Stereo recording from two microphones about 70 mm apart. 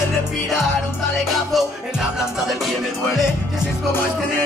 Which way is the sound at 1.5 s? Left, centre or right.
Centre.